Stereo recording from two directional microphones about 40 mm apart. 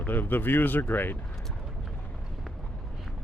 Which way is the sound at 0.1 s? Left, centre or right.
Left.